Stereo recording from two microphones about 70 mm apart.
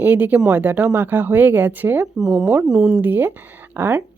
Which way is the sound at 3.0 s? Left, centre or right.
Right.